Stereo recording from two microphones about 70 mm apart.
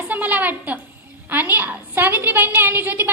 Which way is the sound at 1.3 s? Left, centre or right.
Right.